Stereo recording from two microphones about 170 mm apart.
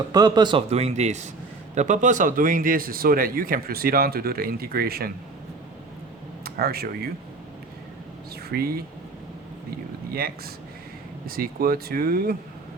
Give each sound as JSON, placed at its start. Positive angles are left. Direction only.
{"t": 0.1, "sound": "speech", "side_deg": -25}
{"t": 0.7, "sound": "speech", "side_deg": -40}
{"t": 6.4, "sound": "speech", "side_deg": -65}
{"t": 8.4, "sound": "speech", "side_deg": -65}
{"t": 10.1, "sound": "speech", "side_deg": -65}